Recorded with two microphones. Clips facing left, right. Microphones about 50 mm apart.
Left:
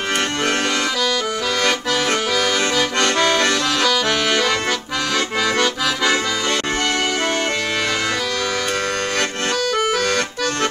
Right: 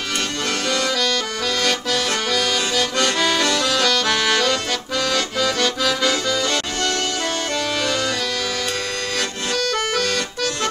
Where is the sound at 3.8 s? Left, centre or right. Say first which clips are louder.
Left 1 dB; centre.